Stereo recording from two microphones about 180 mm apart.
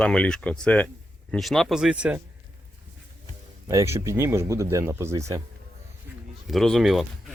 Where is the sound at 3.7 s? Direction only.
15° right (ahead or behind).